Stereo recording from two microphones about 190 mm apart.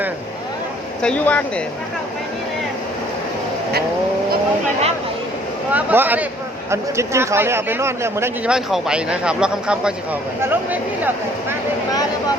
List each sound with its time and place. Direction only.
1.0 s speech: 5° left (ahead or behind)
5.7 s speech: 10° right (ahead or behind)